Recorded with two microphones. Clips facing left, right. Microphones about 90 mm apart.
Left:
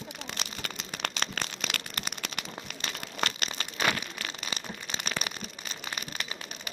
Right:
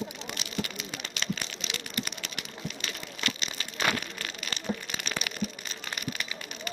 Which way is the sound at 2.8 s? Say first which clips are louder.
Left 4 dB; 40° left (ahead or behind).